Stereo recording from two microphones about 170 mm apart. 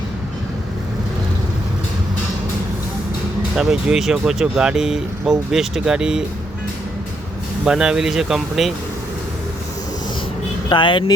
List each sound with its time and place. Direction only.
3.5 s speech: 5° right (ahead or behind)
7.6 s speech: 5° right (ahead or behind)
10.7 s speech: 30° left (ahead or behind)